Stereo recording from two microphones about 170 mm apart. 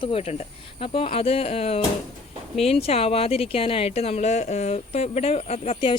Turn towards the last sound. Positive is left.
turn(degrees=35)  # may be behind; listen again after turning